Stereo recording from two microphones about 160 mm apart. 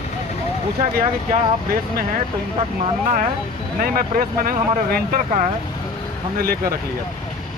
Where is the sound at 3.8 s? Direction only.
60° right (ahead or behind).